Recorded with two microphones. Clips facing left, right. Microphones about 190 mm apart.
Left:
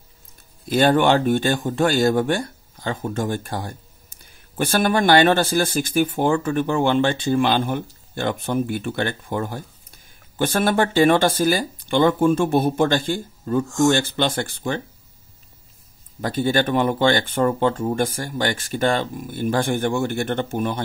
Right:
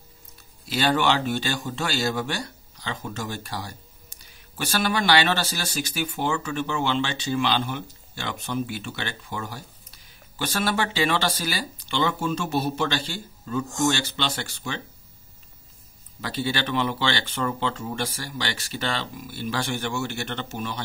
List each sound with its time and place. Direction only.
0.7 s speech: 50° left (ahead or behind)
16.2 s speech: 50° left (ahead or behind)